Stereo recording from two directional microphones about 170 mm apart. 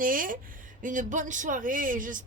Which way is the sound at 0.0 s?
55° right (ahead or behind).